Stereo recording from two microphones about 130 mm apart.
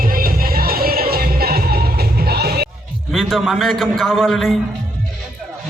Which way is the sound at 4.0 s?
Centre (ahead or behind).